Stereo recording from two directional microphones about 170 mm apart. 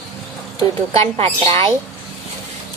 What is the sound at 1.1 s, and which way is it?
Speech, 35° right (ahead or behind).